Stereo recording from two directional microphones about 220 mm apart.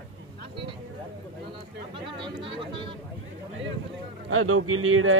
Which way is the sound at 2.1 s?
25° right (ahead or behind).